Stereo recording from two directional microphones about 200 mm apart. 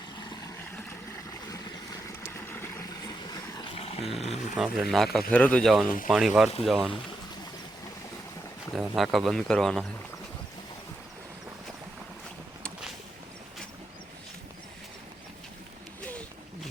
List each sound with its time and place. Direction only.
0.2 s vehicle: 20° left (ahead or behind)
0.9 s a sound: 15° left (ahead or behind)
2.2 s boat: 10° left (ahead or behind)
3.6 s a sound: 30° left (ahead or behind)
4.2 s speech: 30° left (ahead or behind)
4.5 s speech: centre (ahead or behind)
8.7 s speech: centre (ahead or behind)